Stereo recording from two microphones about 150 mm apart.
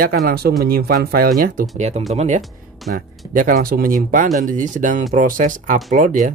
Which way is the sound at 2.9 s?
70° right (ahead or behind).